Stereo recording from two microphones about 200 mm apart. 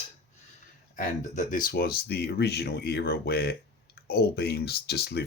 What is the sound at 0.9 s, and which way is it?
Speech, 40° left (ahead or behind).